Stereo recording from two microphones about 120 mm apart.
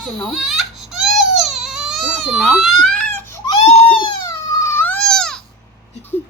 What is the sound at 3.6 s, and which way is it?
Crying, 65° left (ahead or behind).